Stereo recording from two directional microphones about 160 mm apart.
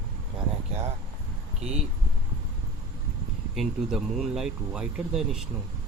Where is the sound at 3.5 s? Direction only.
5° right (ahead or behind).